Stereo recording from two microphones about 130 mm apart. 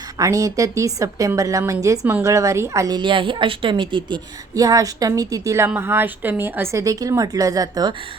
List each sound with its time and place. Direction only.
0.2 s a woman's voice: 25° right (ahead or behind)